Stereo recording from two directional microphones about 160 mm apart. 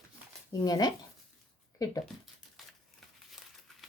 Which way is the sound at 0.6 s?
25° left (ahead or behind).